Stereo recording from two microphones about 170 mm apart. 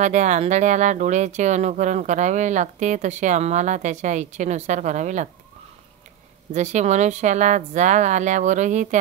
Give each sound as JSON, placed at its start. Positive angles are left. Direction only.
{"t": 0.0, "sound": "speech", "side_deg": -45}
{"t": 6.5, "sound": "speech", "side_deg": -45}